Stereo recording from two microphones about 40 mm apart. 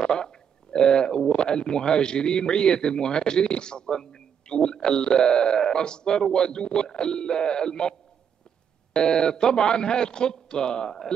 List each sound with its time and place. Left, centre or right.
0.0 s speech: centre
8.9 s speech: centre